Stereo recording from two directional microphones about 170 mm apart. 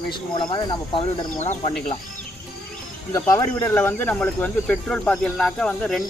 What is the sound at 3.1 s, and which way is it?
Speech, 20° left (ahead or behind).